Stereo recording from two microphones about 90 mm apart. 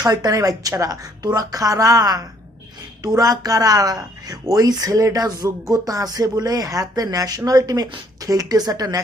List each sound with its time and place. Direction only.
0.0 s speech: 45° right (ahead or behind)